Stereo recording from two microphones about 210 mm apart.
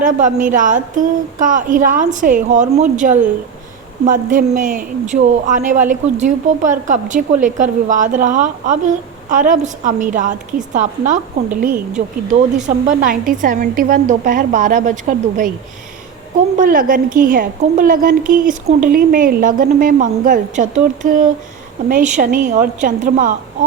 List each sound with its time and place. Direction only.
0.0 s a woman's voice: 35° right (ahead or behind)
16.6 s a woman's voice: 40° right (ahead or behind)